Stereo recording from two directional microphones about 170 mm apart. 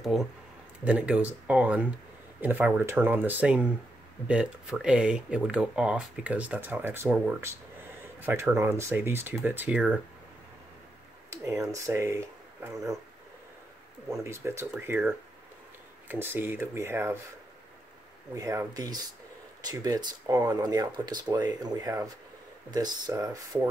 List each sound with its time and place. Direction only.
0.0 s speech: centre (ahead or behind)
11.2 s speech: 15° right (ahead or behind)
14.1 s speech: 15° right (ahead or behind)
18.3 s speech: 20° right (ahead or behind)